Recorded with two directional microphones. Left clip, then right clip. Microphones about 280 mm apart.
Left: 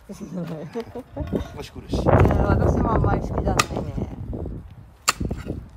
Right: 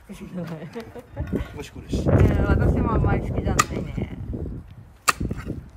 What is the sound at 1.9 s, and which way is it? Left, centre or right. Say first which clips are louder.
Speech: left 4 dB; centre.